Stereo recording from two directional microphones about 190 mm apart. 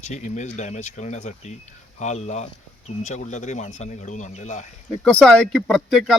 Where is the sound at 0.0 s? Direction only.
40° left (ahead or behind).